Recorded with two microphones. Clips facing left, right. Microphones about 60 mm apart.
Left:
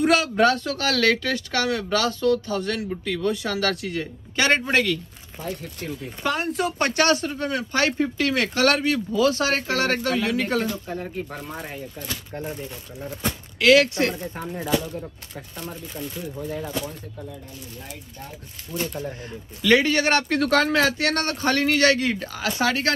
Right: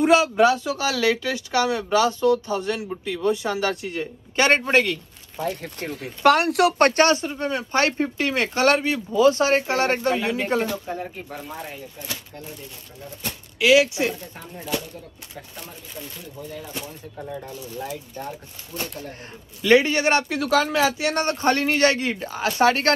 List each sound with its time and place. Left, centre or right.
0.0 s speech: centre
5.4 s speech: right
7.0 s speech: right
10.9 s speech: centre
13.6 s speech: centre
15.5 s speech: centre
19.6 s speech: right
20.2 s speech: centre
21.0 s speech: centre; by 22.9 s right